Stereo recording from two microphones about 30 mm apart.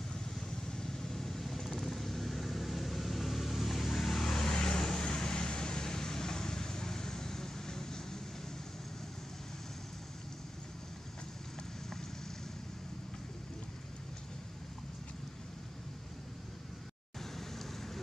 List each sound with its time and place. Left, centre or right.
0.7 s vehicle: centre
4.3 s vehicle: left